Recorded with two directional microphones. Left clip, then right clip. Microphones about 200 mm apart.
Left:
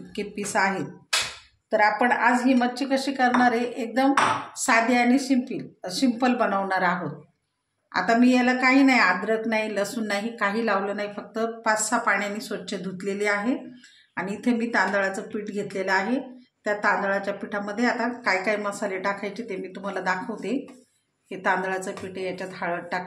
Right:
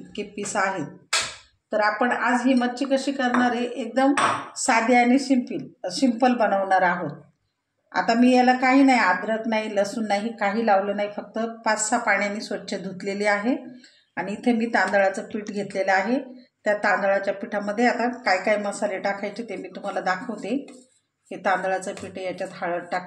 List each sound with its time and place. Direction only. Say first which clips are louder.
0.1 s a woman's voice: left 1 dB; 25° left (ahead or behind)
1.7 s a woman's voice: left 1 dB; 25° left (ahead or behind)
4.6 s a woman's voice: right 2 dB; 15° left (ahead or behind)
14.1 s a woman's voice: right 2 dB; 10° left (ahead or behind)